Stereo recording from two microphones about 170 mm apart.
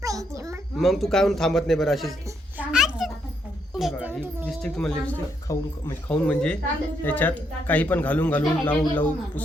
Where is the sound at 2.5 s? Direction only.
5° right (ahead or behind).